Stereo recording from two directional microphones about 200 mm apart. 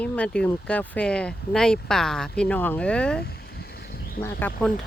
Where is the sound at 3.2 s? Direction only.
50° left (ahead or behind).